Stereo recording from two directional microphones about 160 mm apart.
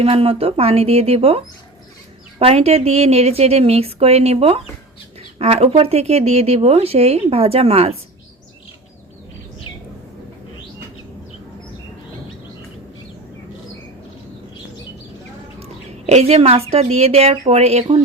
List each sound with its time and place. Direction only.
0.0 s a woman's voice: 40° right (ahead or behind)
2.4 s a woman's voice: 40° right (ahead or behind)
15.6 s a woman's voice: 40° right (ahead or behind)